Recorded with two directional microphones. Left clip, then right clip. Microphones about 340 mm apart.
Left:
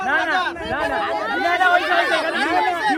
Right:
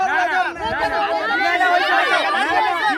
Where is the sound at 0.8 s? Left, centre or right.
Right.